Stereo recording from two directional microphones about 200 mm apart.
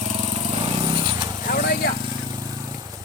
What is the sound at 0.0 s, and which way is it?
Vehicle, 30° right (ahead or behind).